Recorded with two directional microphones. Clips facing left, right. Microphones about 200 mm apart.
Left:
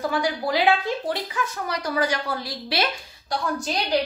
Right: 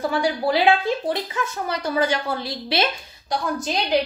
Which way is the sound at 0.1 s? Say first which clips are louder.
Right 3 dB; 25° right (ahead or behind).